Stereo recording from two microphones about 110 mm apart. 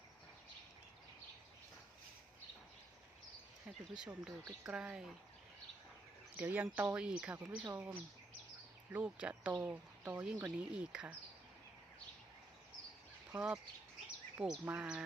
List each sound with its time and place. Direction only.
3.9 s speech: 10° right (ahead or behind)
6.3 s speech: 15° right (ahead or behind)
13.3 s speech: 15° right (ahead or behind)
14.3 s speech: 5° right (ahead or behind)